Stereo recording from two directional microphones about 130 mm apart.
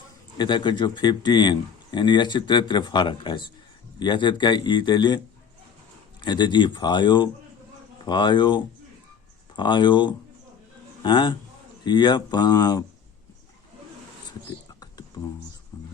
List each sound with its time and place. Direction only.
0.3 s a man's voice: 35° left (ahead or behind)
6.2 s a man's voice: 35° left (ahead or behind)
14.8 s a sound: 30° left (ahead or behind)